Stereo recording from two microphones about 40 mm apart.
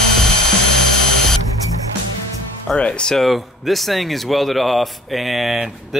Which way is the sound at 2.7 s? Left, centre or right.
Left.